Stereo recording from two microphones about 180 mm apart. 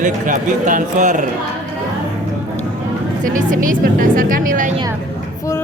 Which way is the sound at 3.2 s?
45° right (ahead or behind).